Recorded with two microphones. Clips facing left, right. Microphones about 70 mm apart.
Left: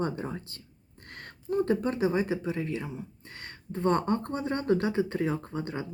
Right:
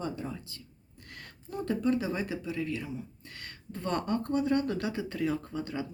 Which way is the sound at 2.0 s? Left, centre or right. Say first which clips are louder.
Left 6 dB; left.